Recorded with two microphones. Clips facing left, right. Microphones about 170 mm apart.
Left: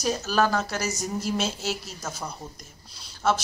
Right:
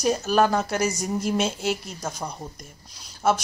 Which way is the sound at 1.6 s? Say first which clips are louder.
Right 4 dB; 55° right (ahead or behind).